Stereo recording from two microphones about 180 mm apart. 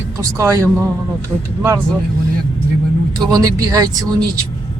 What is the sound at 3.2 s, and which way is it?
Speech, 20° right (ahead or behind).